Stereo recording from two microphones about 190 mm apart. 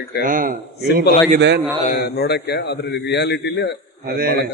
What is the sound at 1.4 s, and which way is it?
Speech, 65° right (ahead or behind).